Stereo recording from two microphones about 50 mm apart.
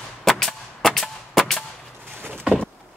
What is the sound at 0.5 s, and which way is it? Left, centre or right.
Music, centre.